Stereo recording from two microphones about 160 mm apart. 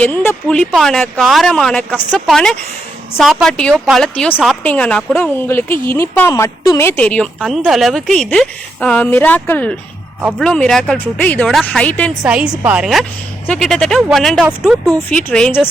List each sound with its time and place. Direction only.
0.0 s a woman's voice: 10° left (ahead or behind)
12.2 s a woman's voice: 5° right (ahead or behind)